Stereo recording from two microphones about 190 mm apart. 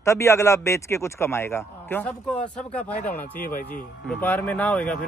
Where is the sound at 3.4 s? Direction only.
45° left (ahead or behind).